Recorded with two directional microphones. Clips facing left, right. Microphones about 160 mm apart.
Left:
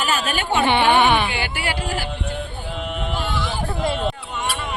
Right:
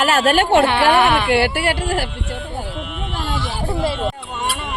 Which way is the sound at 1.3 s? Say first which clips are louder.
Right 9 dB; 70° right (ahead or behind).